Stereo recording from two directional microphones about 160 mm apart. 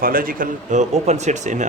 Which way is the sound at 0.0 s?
65° right (ahead or behind).